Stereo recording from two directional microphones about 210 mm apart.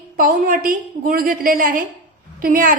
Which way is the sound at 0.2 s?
40° right (ahead or behind).